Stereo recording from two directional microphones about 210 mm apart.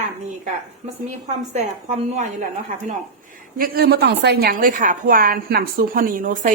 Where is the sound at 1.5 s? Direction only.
35° right (ahead or behind).